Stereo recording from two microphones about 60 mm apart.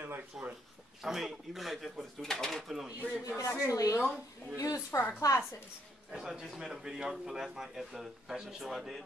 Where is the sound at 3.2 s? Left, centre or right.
Left.